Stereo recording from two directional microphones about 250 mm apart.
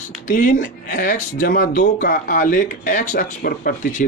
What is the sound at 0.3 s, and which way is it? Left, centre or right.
Speech, left.